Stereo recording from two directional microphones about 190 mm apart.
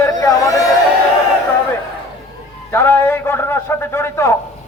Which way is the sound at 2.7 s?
10° left (ahead or behind).